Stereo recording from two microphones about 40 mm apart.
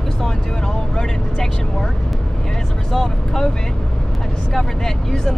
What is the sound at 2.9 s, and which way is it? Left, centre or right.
Speech, centre.